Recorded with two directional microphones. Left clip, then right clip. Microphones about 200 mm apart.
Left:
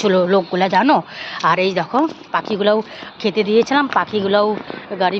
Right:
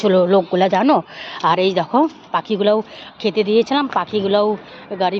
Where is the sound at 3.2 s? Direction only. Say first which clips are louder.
Even; centre (ahead or behind).